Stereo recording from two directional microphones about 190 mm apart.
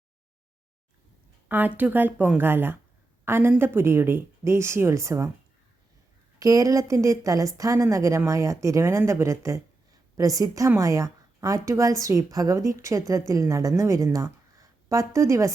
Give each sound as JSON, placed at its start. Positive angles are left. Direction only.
{"t": 1.5, "sound": "a woman's voice", "side_deg": -10}
{"t": 6.4, "sound": "a woman's voice", "side_deg": -15}